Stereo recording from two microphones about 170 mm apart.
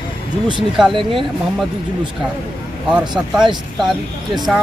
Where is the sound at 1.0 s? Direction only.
30° right (ahead or behind).